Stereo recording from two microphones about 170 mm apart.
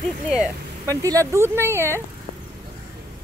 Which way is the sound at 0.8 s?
20° right (ahead or behind).